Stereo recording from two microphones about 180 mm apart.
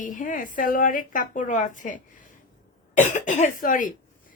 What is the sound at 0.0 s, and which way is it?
A woman's voice, 45° left (ahead or behind).